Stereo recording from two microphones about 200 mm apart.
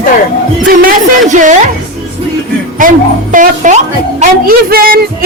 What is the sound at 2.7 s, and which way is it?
A woman's voice, 40° right (ahead or behind).